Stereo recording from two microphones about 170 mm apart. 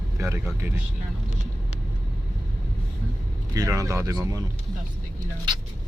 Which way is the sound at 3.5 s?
20° right (ahead or behind).